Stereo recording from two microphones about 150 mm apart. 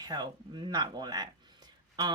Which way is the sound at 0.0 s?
30° right (ahead or behind).